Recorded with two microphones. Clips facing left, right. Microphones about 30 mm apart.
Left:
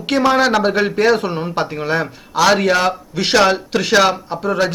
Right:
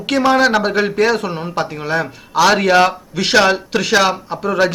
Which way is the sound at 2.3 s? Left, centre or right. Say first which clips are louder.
Right 2 dB; centre.